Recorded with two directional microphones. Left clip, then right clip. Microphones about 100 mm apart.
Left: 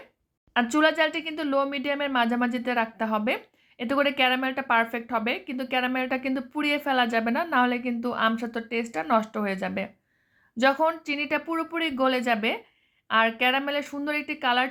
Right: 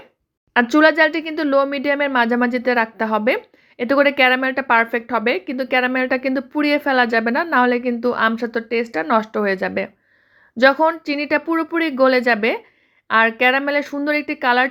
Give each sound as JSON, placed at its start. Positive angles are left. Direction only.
{"t": 0.5, "sound": "speech", "side_deg": -50}